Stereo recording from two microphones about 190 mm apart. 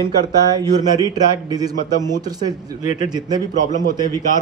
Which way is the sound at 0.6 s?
20° right (ahead or behind).